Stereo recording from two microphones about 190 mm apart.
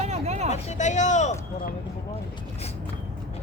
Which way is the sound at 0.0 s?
35° right (ahead or behind).